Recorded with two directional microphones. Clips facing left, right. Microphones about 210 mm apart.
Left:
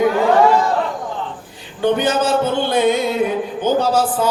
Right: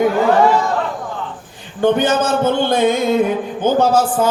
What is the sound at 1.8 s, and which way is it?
Speech, 50° right (ahead or behind).